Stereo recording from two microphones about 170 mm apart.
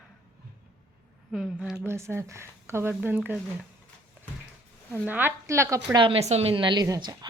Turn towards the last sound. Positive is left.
turn(degrees=-25)  # may be behind; listen again after turning